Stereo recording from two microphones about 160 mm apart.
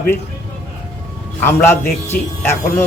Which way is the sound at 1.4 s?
15° left (ahead or behind).